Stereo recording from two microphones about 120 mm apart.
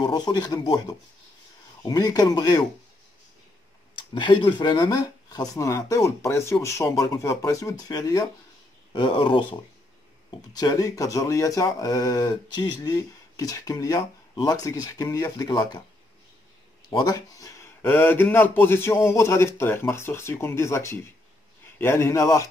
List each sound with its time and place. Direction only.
0.0 s speech: 35° left (ahead or behind)
4.1 s speech: 40° left (ahead or behind)
16.9 s speech: 35° left (ahead or behind)